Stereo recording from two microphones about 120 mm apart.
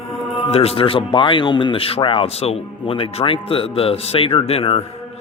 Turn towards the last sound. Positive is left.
turn(degrees=55)  # may be behind; listen again after turning